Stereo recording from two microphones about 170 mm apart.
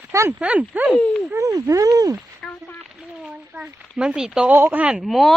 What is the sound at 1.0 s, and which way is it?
Speech, 10° left (ahead or behind).